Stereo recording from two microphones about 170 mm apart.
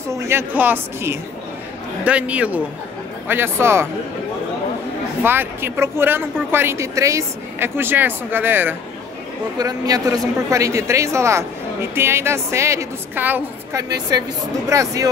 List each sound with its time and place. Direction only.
0.1 s speech: 15° right (ahead or behind)
5.2 s speech: 10° right (ahead or behind)
13.8 s speech: 20° right (ahead or behind)